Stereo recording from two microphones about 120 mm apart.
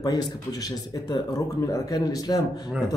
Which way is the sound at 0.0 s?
30° left (ahead or behind).